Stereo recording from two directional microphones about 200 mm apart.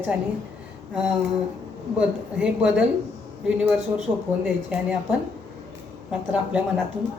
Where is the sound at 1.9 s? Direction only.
5° right (ahead or behind).